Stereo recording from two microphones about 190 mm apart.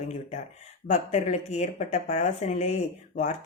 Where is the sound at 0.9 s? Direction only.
40° left (ahead or behind).